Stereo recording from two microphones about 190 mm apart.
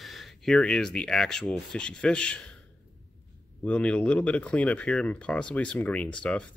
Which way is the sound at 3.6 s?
5° left (ahead or behind).